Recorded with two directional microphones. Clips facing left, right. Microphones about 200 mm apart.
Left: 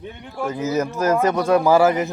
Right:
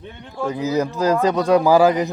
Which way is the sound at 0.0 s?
15° left (ahead or behind).